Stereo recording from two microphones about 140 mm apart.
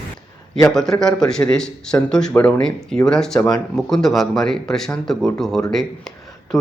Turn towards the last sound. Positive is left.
turn(degrees=0)  # may be behind; listen again after turning